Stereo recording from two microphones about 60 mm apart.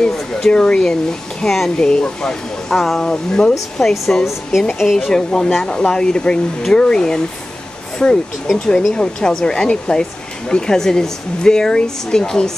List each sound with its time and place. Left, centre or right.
0.0 s speech: centre
3.9 s speech: centre